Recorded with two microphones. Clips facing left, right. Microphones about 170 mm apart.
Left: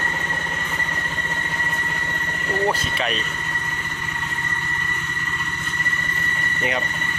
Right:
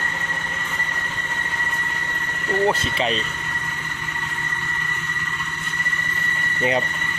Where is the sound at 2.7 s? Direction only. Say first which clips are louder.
Right 2 dB; 25° right (ahead or behind).